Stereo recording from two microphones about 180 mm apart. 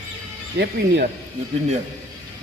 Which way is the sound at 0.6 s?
70° right (ahead or behind).